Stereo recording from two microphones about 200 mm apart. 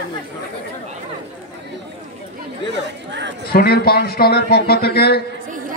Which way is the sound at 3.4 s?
50° left (ahead or behind).